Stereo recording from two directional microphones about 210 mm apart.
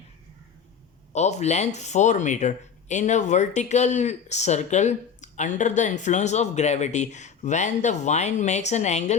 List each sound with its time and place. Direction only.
1.1 s speech: 30° left (ahead or behind)